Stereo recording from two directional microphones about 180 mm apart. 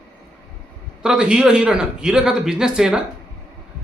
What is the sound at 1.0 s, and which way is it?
A man's voice, 5° right (ahead or behind).